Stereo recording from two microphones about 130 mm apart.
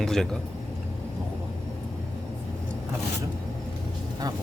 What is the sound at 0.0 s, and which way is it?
Speech, 5° left (ahead or behind).